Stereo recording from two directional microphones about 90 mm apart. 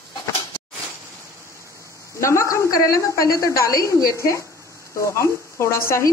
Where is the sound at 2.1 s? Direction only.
35° left (ahead or behind).